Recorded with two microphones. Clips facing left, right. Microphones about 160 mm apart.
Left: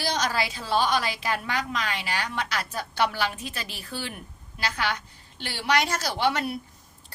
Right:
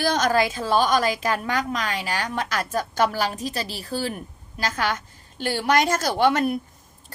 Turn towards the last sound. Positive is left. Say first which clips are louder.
# right 6 dB
turn(degrees=-50)  # may be behind; listen again after turning